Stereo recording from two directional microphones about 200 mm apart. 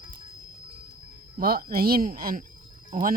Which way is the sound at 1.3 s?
45° right (ahead or behind).